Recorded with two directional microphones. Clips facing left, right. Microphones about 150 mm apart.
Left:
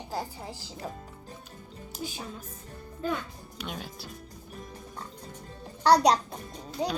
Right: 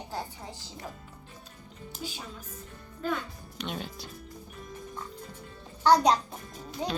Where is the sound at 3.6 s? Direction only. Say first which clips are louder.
Right 2 dB; 5° left (ahead or behind).